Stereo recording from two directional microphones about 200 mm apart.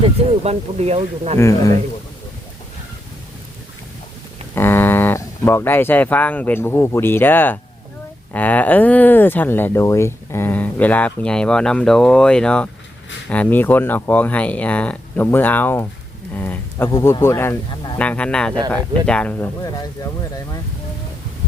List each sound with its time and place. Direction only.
0.4 s speech: 30° right (ahead or behind)
1.4 s speech: 15° left (ahead or behind)
4.5 s speech: 10° left (ahead or behind)